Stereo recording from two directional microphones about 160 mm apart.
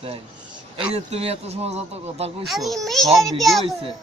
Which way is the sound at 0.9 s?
40° right (ahead or behind).